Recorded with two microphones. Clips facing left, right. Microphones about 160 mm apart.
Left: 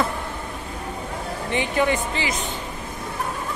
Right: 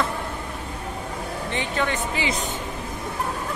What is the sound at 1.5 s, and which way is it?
Speech, 15° left (ahead or behind).